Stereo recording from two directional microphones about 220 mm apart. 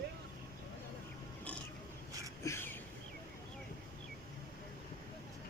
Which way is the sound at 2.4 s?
10° left (ahead or behind).